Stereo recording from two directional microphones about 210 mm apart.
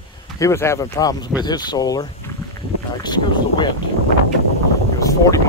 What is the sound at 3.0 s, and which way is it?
Speech, 20° left (ahead or behind).